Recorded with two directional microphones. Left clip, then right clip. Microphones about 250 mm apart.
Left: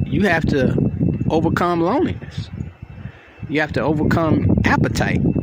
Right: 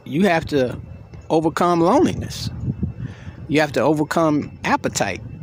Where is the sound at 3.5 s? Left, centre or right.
Centre.